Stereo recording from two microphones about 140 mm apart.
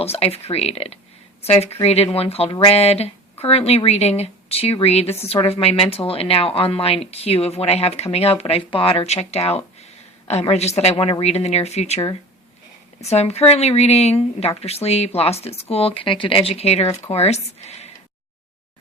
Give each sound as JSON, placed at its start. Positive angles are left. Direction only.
{"t": 0.0, "sound": "speech", "side_deg": 45}
{"t": 13.0, "sound": "speech", "side_deg": 50}